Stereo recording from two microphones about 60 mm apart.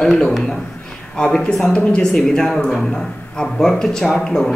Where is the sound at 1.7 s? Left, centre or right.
Centre.